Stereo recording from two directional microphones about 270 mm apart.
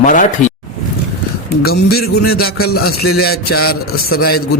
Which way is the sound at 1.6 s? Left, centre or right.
Left.